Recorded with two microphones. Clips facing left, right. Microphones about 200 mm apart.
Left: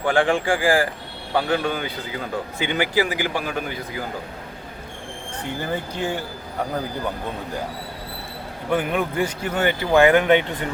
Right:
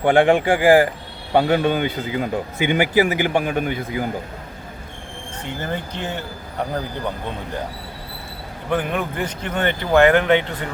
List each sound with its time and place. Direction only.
0.0 s a man's voice: 20° right (ahead or behind)
5.5 s speech: 10° left (ahead or behind)
8.7 s speech: 10° left (ahead or behind)